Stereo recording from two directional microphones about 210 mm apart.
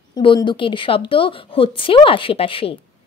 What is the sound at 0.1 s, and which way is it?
Speech, 20° left (ahead or behind).